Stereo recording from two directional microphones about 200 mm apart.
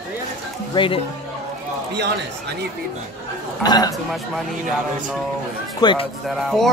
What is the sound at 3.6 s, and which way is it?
Speech, 20° left (ahead or behind).